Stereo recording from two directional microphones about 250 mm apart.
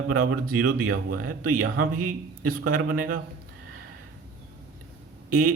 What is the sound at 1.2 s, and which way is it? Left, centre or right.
Speech, right.